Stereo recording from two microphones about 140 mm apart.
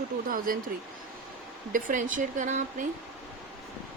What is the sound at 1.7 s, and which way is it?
Speech, 70° right (ahead or behind).